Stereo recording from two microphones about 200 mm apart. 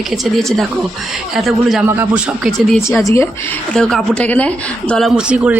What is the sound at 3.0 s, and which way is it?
Speech, 15° left (ahead or behind).